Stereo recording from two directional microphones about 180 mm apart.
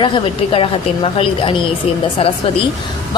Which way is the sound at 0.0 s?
30° left (ahead or behind).